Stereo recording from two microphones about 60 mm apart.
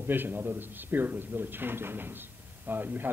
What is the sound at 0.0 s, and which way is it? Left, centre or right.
A man's voice, right.